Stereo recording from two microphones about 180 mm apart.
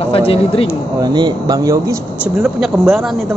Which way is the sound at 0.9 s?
25° right (ahead or behind).